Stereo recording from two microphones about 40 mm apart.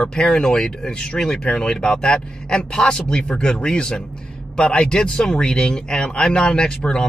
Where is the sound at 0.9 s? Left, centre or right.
Left.